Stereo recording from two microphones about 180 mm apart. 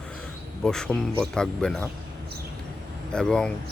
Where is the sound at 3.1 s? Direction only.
5° left (ahead or behind).